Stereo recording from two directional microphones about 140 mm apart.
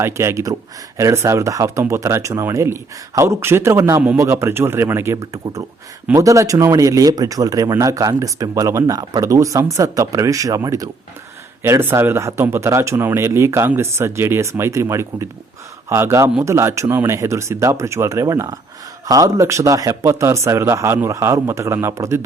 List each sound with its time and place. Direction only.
0.0 s speech: 20° right (ahead or behind)